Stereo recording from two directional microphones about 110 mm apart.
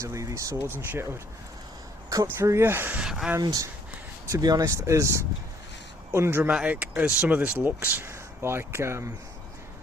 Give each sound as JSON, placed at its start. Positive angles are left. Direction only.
{"t": 0.0, "sound": "speech", "side_deg": -25}
{"t": 2.4, "sound": "speech", "side_deg": -25}
{"t": 3.0, "sound": "speech", "side_deg": -5}
{"t": 3.4, "sound": "speech", "side_deg": -35}